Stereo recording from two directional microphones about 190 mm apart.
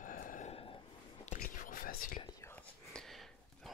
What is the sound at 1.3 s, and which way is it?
Whispering, 50° left (ahead or behind).